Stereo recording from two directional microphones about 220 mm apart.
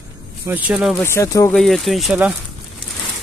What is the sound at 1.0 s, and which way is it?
Speech, 15° left (ahead or behind).